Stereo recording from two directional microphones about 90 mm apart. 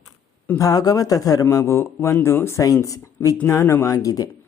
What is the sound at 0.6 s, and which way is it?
A man's voice, 45° left (ahead or behind).